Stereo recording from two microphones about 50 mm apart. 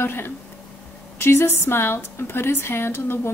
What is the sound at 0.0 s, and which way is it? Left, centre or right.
A woman's voice, left.